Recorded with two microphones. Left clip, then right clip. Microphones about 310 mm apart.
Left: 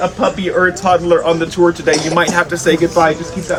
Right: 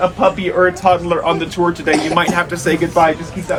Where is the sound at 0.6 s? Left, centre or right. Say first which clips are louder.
Left 1 dB; centre.